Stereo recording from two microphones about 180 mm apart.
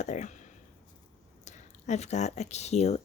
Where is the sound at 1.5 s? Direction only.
40° left (ahead or behind).